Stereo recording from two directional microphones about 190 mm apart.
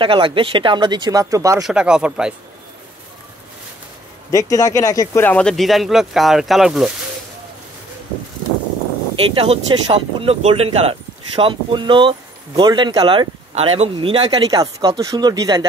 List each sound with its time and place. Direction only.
0.0 s speech: 25° right (ahead or behind)
1.6 s speech: 5° right (ahead or behind)
4.3 s speech: 15° left (ahead or behind); by 6.9 s centre (ahead or behind)
9.3 s speech: 30° right (ahead or behind)